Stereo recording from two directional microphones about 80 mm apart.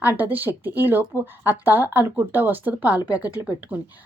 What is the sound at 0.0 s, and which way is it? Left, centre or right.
A woman's voice, right.